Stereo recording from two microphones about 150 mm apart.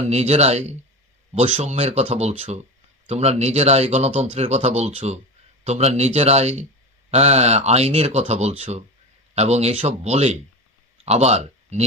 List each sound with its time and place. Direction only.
0.0 s speech: 45° right (ahead or behind)